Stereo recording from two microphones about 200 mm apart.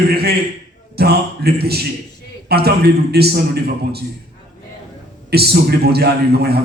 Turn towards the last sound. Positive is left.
turn(degrees=-50)  # may be behind; listen again after turning